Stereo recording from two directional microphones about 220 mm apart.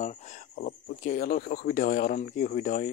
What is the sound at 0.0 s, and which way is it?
Speech, 30° left (ahead or behind).